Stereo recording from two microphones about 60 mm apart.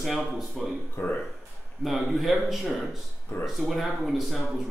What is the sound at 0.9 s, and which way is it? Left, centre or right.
Speech, left.